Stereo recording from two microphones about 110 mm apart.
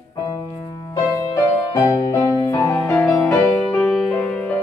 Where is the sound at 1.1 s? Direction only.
35° left (ahead or behind); by 4.6 s 10° left (ahead or behind).